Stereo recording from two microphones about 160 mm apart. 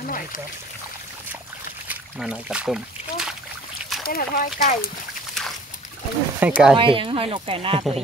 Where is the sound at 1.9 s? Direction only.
5° right (ahead or behind).